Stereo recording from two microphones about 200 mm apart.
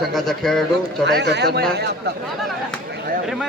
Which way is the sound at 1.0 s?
55° right (ahead or behind).